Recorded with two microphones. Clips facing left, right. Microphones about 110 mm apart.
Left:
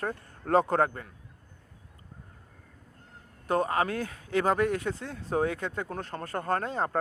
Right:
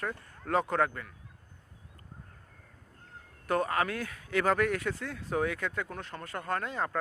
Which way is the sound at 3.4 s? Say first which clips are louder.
Left 2 dB; 25° left (ahead or behind).